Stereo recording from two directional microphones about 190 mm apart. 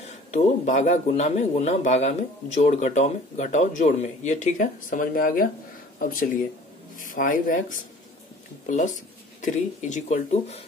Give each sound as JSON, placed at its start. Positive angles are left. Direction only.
{"t": 0.0, "sound": "a man's voice", "side_deg": 35}